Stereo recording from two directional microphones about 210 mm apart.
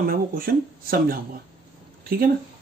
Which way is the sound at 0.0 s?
45° right (ahead or behind).